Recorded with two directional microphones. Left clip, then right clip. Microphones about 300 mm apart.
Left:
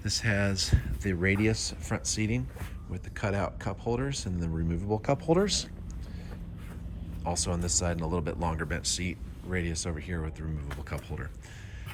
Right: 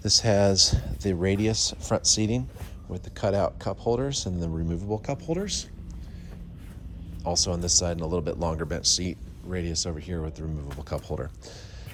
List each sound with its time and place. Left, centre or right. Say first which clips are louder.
0.0 s speech: right 8 dB; centre
7.3 s speech: right 6 dB; centre